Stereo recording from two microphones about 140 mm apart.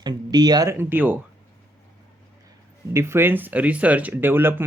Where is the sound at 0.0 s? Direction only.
30° right (ahead or behind); by 1.2 s 15° right (ahead or behind).